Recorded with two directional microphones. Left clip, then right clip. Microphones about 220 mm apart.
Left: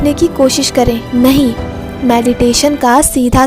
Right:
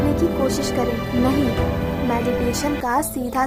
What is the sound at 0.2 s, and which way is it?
Speech, 35° left (ahead or behind).